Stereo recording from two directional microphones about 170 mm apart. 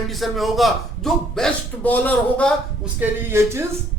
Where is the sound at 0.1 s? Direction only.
Centre (ahead or behind).